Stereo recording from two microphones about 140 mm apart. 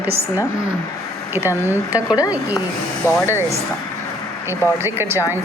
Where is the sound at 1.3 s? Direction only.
15° right (ahead or behind).